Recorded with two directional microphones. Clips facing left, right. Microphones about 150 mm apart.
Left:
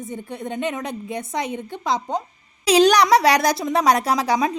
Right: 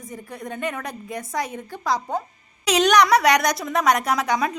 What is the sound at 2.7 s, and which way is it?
A woman's voice, 35° left (ahead or behind).